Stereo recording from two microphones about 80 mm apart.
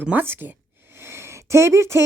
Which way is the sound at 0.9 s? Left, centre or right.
Right.